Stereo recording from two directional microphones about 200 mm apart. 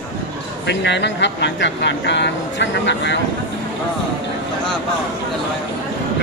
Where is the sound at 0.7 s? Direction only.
60° left (ahead or behind).